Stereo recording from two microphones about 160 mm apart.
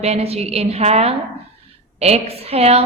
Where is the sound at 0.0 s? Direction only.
40° right (ahead or behind).